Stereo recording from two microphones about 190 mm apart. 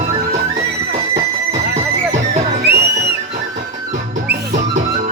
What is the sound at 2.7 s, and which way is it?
Music, 60° right (ahead or behind).